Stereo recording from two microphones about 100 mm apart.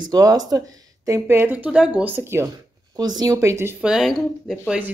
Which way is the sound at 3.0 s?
40° right (ahead or behind).